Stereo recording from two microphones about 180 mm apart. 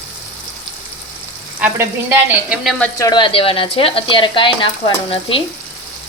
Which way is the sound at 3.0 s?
25° left (ahead or behind).